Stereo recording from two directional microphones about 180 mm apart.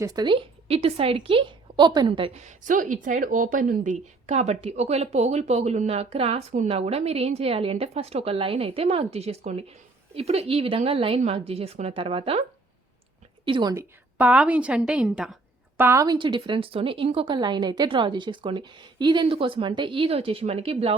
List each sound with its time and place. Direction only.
0.0 s a woman's voice: 20° right (ahead or behind)
13.4 s a woman's voice: 25° right (ahead or behind)
14.2 s a woman's voice: 5° right (ahead or behind)
15.8 s a woman's voice: 15° right (ahead or behind); by 20.9 s 35° right (ahead or behind)